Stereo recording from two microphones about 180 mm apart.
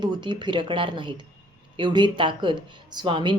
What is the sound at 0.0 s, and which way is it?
Speech, 25° right (ahead or behind).